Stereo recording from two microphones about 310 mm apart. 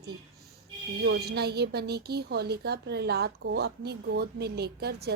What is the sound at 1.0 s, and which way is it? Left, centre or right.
Speech, right.